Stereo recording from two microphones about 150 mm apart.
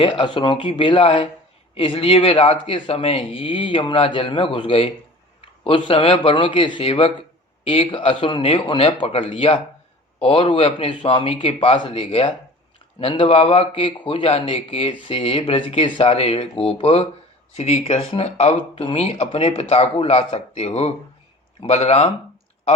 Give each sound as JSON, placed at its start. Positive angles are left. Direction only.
{"t": 0.0, "sound": "speech", "side_deg": 35}